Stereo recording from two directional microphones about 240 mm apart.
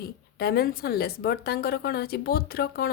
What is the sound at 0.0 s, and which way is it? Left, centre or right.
Speech, left.